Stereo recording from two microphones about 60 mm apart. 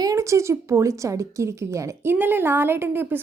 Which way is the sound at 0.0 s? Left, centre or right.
Right.